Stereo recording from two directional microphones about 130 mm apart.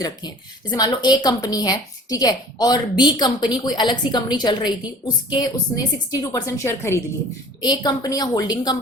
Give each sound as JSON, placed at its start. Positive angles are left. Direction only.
{"t": 0.7, "sound": "a woman's voice", "side_deg": 30}
{"t": 7.6, "sound": "a woman's voice", "side_deg": 30}